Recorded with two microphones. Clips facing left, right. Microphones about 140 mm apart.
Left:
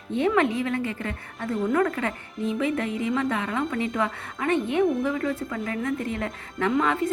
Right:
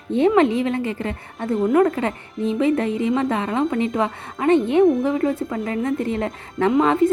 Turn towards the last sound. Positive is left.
turn(degrees=-30)  # may be behind; listen again after turning